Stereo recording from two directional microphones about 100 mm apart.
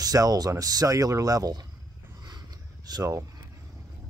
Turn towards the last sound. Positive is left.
turn(degrees=-35)  # may be behind; listen again after turning